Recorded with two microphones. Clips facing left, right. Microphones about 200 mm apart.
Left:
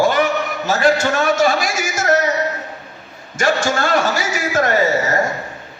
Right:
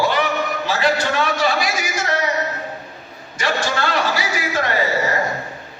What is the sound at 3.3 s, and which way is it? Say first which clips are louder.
A man's voice: left 4 dB; 45° left (ahead or behind).